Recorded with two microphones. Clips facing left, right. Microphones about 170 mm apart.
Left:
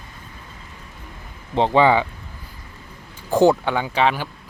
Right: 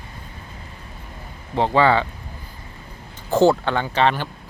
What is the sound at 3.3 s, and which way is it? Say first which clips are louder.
Speech: even; 15° left (ahead or behind).